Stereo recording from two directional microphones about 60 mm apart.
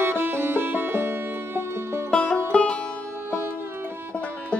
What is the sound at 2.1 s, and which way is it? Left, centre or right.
Music, centre.